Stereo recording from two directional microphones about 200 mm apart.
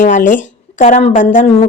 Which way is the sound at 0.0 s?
40° left (ahead or behind).